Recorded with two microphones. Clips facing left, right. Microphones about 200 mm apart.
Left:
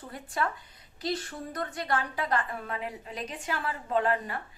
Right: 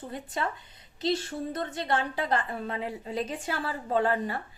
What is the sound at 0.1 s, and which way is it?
A woman's voice, 20° right (ahead or behind).